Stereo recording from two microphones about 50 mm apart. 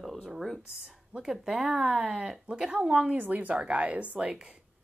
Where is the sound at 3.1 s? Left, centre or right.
Right.